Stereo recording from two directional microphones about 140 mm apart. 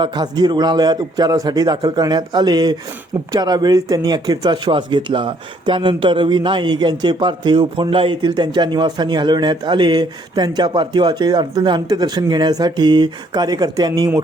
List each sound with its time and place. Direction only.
0.0 s a man's voice: 30° right (ahead or behind)